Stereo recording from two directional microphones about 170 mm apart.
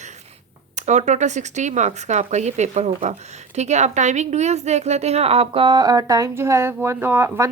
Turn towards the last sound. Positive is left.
turn(degrees=-15)  # may be behind; listen again after turning